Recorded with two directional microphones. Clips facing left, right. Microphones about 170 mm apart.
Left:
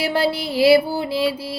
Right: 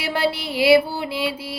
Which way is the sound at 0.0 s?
35° left (ahead or behind).